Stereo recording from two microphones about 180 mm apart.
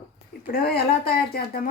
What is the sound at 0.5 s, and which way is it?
Speech, 60° left (ahead or behind).